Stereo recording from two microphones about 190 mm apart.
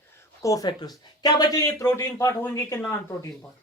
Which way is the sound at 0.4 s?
20° left (ahead or behind).